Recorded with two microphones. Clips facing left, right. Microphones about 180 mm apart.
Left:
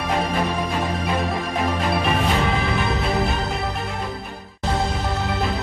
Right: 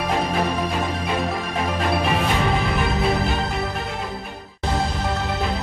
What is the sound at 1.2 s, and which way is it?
Music, centre (ahead or behind).